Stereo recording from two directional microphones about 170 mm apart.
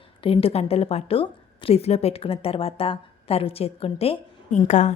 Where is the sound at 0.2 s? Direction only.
35° left (ahead or behind).